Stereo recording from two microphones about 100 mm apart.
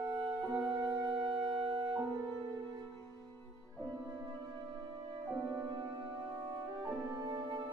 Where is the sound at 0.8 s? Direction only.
40° right (ahead or behind).